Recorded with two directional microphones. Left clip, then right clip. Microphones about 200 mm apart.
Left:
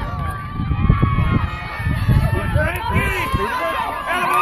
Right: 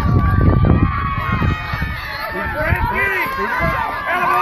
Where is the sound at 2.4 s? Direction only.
15° right (ahead or behind).